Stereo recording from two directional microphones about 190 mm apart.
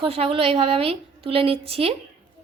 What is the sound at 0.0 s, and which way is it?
A woman's voice, 30° right (ahead or behind).